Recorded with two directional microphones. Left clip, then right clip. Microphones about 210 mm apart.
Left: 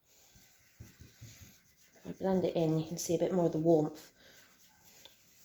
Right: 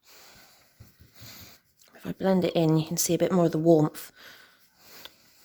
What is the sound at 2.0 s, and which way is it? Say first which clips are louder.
Speech: right 7 dB; 45° right (ahead or behind).